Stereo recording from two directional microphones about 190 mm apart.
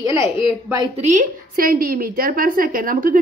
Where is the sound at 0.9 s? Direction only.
40° right (ahead or behind).